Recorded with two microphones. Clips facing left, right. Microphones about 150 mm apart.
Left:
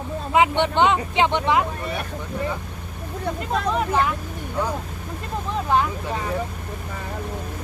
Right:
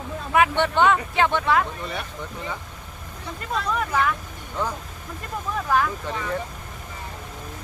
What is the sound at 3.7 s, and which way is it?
Speech, 25° left (ahead or behind).